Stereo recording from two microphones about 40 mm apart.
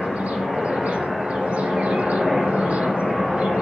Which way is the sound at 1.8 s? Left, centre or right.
Right.